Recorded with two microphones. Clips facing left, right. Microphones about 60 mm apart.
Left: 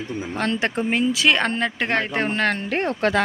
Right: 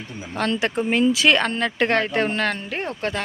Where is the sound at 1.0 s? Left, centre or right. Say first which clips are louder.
Right 2 dB; centre.